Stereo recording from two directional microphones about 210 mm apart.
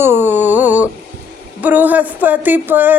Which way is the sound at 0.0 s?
10° right (ahead or behind).